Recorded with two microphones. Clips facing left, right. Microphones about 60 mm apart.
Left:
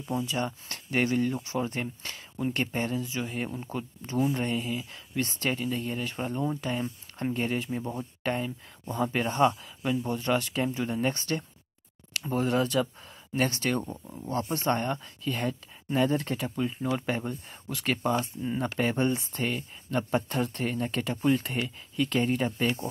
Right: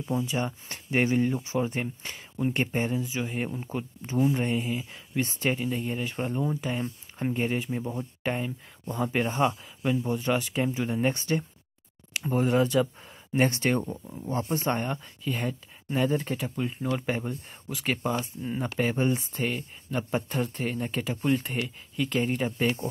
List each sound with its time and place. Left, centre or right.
0.0 s speech: centre
0.5 s speech: right
4.5 s speech: centre
8.2 s speech: centre; by 13.8 s right
13.8 s speech: centre
14.5 s speech: centre